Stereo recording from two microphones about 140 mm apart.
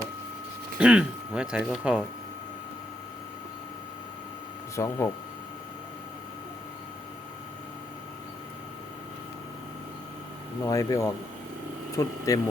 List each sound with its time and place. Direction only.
0.8 s speech: 5° right (ahead or behind)
4.7 s speech: 20° left (ahead or behind)
10.7 s speech: 25° left (ahead or behind)